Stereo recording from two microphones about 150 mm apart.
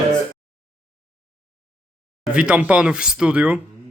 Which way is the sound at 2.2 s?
5° right (ahead or behind).